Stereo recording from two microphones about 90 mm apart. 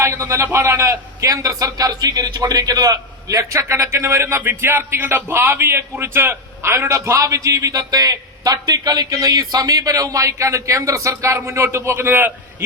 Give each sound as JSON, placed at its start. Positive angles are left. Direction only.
{"t": 0.0, "sound": "a man's voice", "side_deg": -30}